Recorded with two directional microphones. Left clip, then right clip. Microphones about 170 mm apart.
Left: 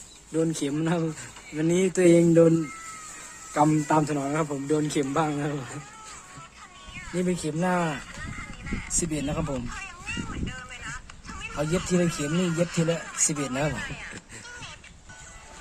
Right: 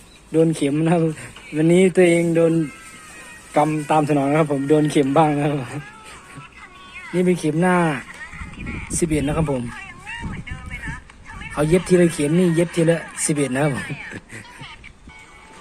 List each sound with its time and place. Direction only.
0.3 s speech: 5° right (ahead or behind)
3.5 s speech: 15° right (ahead or behind)
7.2 s speech: 15° right (ahead or behind)
11.5 s speech: 15° right (ahead or behind)